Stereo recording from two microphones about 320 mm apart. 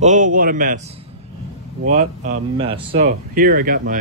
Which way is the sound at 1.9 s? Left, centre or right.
Right.